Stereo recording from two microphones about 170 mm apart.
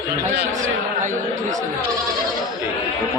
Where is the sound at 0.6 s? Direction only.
45° right (ahead or behind).